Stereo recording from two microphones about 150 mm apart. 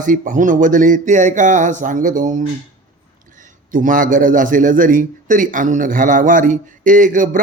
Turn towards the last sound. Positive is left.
turn(degrees=-60)  # may be behind; listen again after turning